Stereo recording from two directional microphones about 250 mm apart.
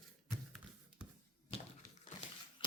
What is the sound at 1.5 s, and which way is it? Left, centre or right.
Crushing, left.